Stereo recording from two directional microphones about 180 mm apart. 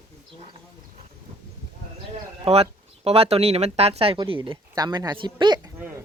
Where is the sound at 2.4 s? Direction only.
35° right (ahead or behind).